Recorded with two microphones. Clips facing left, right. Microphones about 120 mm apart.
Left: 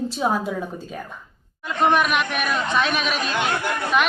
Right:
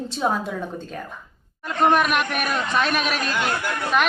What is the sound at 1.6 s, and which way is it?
A woman's voice, centre (ahead or behind).